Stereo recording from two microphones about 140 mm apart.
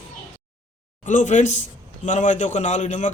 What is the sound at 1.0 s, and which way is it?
A man's voice, 60° left (ahead or behind).